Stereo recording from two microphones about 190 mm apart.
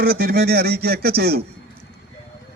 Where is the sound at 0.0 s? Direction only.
50° right (ahead or behind).